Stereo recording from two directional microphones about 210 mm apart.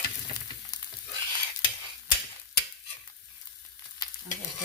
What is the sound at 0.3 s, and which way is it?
Frying, 20° left (ahead or behind).